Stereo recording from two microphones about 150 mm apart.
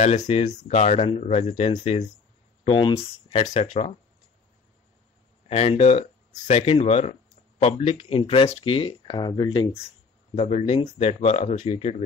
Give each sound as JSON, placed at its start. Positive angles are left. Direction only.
{"t": 0.3, "sound": "speech", "side_deg": 50}
{"t": 5.5, "sound": "speech", "side_deg": 45}
{"t": 10.3, "sound": "speech", "side_deg": 45}